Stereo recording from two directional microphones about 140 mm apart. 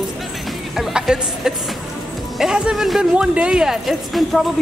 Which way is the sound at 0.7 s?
5° right (ahead or behind).